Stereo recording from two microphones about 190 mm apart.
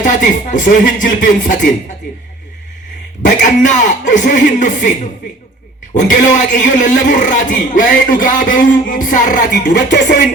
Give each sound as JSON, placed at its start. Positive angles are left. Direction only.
{"t": 0.0, "sound": "a man's voice", "side_deg": 45}
{"t": 3.2, "sound": "a man's voice", "side_deg": 40}
{"t": 5.9, "sound": "a man's voice", "side_deg": 40}